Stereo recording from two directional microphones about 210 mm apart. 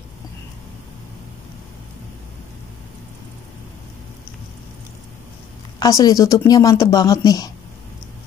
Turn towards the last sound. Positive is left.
turn(degrees=15)  # may be behind; listen again after turning